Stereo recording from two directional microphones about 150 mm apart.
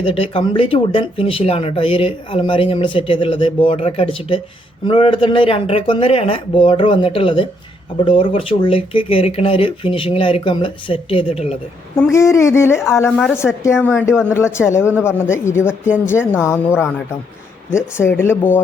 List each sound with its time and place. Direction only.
0.0 s speech: 40° left (ahead or behind)
12.1 s speech: 20° left (ahead or behind)